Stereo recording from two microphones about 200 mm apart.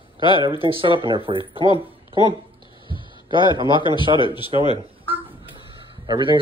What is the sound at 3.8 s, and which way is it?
Speech, 25° left (ahead or behind).